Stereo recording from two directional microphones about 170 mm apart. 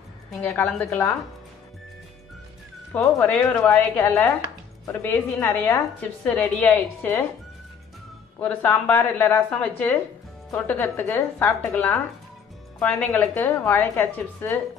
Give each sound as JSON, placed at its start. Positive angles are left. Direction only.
{"t": 0.3, "sound": "a woman's voice", "side_deg": 10}
{"t": 2.9, "sound": "a woman's voice", "side_deg": 10}
{"t": 8.4, "sound": "a woman's voice", "side_deg": 10}